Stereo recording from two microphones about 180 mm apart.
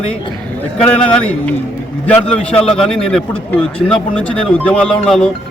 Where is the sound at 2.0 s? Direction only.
5° left (ahead or behind).